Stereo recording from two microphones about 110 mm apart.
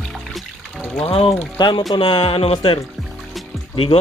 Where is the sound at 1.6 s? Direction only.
35° left (ahead or behind).